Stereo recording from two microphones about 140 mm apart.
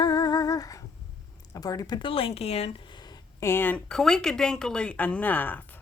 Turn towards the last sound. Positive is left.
turn(degrees=15)  # may be behind; listen again after turning